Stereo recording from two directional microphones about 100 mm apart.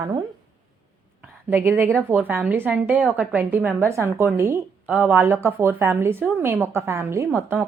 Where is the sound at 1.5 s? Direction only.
20° right (ahead or behind).